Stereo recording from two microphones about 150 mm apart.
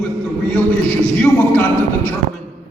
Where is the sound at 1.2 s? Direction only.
10° left (ahead or behind).